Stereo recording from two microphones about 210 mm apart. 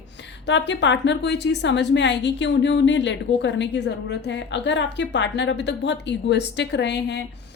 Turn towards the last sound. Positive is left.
turn(degrees=55)  # may be behind; listen again after turning